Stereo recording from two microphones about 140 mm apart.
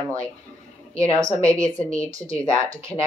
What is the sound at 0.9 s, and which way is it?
Speech, 20° right (ahead or behind).